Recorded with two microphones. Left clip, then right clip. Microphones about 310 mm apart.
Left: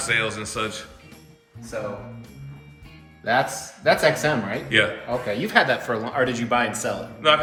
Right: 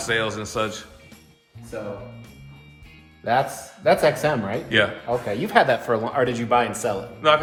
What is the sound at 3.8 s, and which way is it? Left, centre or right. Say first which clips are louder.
Speech: right 1 dB; right.